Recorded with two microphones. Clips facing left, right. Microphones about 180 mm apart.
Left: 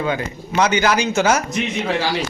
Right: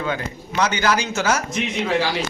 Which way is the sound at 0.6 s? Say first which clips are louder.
Left 3 dB; 15° left (ahead or behind).